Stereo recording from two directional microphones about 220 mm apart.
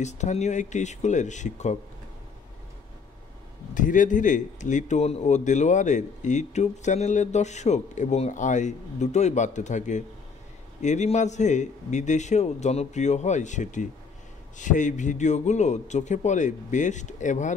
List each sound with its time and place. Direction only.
0.0 s a man's voice: 30° left (ahead or behind)
3.7 s a man's voice: 35° left (ahead or behind)